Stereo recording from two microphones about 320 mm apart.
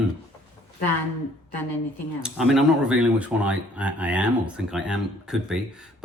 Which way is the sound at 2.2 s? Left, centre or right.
Centre.